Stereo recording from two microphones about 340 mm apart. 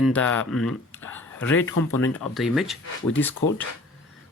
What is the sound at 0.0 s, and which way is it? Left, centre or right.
Speech, centre.